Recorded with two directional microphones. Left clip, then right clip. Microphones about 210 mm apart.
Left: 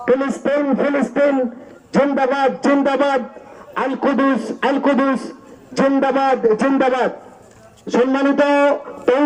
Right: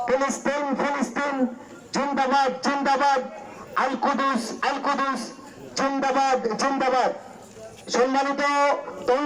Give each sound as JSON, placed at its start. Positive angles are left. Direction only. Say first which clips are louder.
{"t": 0.0, "sound": "a man's voice", "louder": "left 6 dB", "side_deg": 45}